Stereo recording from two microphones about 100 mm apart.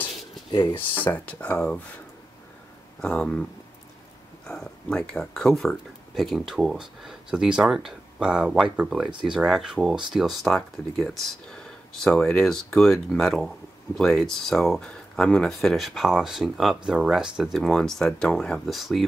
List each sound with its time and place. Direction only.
0.5 s speech: 50° left (ahead or behind)
0.9 s speech: 15° left (ahead or behind)
3.0 s speech: 10° left (ahead or behind)
4.5 s speech: 5° left (ahead or behind)